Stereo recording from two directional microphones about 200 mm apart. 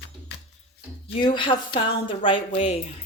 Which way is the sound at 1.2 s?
25° left (ahead or behind).